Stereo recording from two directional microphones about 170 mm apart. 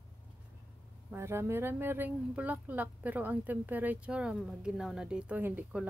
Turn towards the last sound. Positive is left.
turn(degrees=-10)  # may be behind; listen again after turning